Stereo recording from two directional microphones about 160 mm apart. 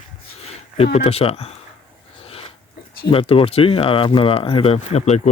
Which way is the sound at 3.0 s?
35° left (ahead or behind).